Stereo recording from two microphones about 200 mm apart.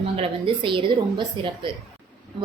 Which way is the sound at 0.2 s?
25° right (ahead or behind).